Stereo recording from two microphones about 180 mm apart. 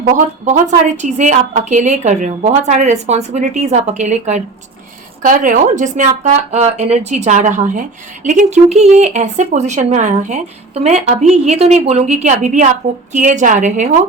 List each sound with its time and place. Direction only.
0.9 s speech: 40° right (ahead or behind)